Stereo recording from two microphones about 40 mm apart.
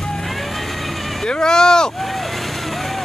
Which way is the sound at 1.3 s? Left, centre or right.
Centre.